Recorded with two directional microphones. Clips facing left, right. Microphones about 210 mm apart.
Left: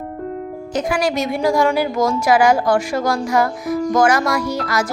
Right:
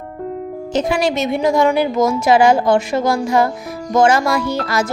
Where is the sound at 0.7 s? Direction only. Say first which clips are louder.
Right 2 dB; 25° right (ahead or behind).